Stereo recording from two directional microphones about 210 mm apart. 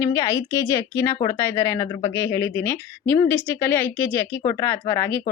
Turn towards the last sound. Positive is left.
turn(degrees=15)  # may be behind; listen again after turning